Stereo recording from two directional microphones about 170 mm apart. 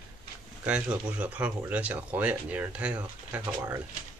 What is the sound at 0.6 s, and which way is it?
Speech, 10° right (ahead or behind).